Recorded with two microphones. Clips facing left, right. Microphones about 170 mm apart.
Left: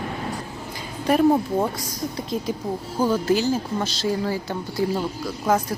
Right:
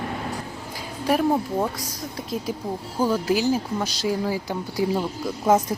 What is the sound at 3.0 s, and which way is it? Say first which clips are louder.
A woman's voice: left 1 dB; 10° right (ahead or behind).